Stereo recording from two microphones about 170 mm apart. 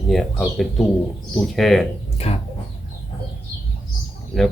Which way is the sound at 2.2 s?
35° left (ahead or behind).